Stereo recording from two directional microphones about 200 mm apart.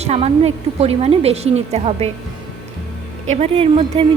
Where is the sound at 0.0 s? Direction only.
30° right (ahead or behind).